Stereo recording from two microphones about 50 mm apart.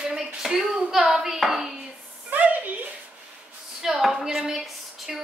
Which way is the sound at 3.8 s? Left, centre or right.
Centre.